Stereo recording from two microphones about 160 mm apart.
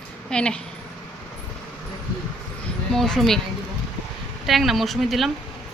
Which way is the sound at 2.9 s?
5° left (ahead or behind).